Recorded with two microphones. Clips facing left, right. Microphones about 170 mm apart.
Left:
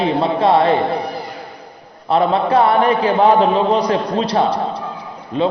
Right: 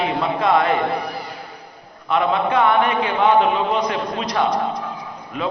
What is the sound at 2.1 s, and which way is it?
A man's voice, 35° left (ahead or behind).